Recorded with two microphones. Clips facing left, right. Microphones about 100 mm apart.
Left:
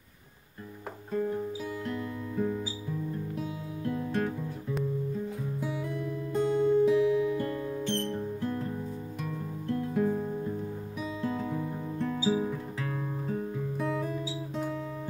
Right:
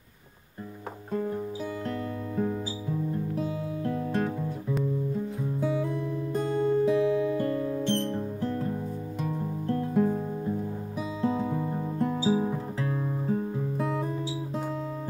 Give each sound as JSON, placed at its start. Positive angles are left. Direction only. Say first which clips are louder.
{"t": 1.9, "sound": "music", "louder": "right 2 dB", "side_deg": -25}
{"t": 5.6, "sound": "music", "louder": "right 7 dB", "side_deg": -30}
{"t": 12.1, "sound": "guitar", "louder": "right 1 dB", "side_deg": -25}